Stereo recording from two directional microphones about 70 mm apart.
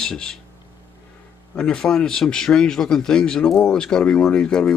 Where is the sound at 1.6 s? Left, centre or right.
Centre.